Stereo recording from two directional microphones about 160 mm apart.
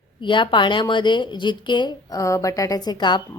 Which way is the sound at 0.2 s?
30° left (ahead or behind).